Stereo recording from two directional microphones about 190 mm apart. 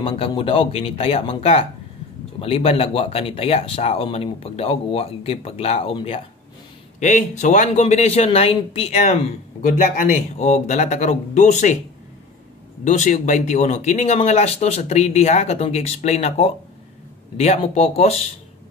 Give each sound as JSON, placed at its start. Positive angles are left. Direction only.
{"t": 0.0, "sound": "speech", "side_deg": 30}
{"t": 12.8, "sound": "speech", "side_deg": 40}